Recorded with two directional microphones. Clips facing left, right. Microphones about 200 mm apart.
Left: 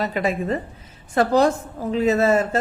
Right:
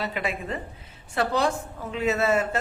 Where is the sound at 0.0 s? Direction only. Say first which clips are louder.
Left 7 dB; 40° left (ahead or behind).